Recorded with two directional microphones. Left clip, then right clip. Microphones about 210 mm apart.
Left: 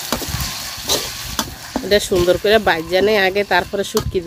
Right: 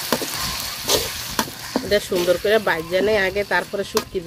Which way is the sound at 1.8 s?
50° left (ahead or behind).